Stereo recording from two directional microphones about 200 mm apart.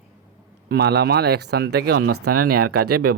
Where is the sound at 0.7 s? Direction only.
55° right (ahead or behind).